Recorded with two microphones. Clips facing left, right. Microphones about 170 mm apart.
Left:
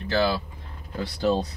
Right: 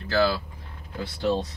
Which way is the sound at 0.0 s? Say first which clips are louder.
Even; 20° left (ahead or behind).